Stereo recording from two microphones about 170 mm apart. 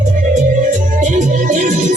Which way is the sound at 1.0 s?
45° right (ahead or behind).